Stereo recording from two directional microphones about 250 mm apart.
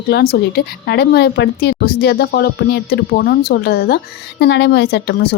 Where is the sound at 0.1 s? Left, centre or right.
Left.